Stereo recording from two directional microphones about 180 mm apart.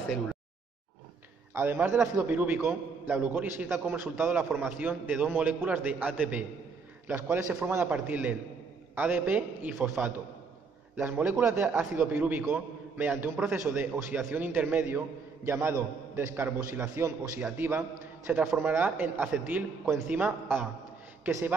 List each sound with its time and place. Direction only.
1.5 s a man's voice: 10° right (ahead or behind)